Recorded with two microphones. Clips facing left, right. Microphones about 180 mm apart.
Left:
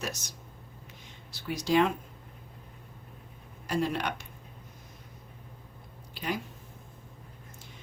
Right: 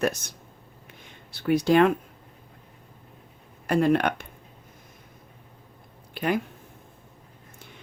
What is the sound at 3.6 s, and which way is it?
Speech, 60° right (ahead or behind).